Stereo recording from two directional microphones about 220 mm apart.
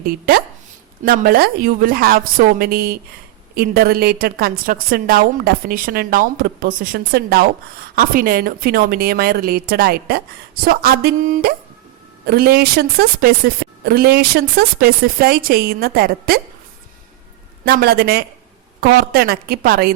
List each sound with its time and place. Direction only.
1.0 s a woman's voice: 40° right (ahead or behind)
17.7 s a woman's voice: 45° right (ahead or behind)